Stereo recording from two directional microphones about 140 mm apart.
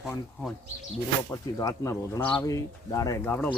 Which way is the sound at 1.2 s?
25° left (ahead or behind).